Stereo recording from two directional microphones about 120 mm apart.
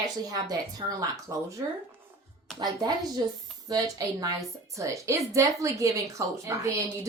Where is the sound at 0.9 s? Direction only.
30° right (ahead or behind).